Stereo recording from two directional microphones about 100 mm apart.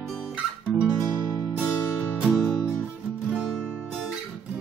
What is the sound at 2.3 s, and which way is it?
Music, 5° left (ahead or behind).